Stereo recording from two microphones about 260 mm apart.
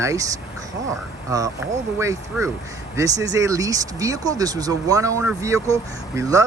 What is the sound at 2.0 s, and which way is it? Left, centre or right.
Speech, centre.